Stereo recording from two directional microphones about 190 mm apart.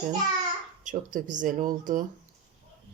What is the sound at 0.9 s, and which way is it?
A woman's voice, 40° right (ahead or behind).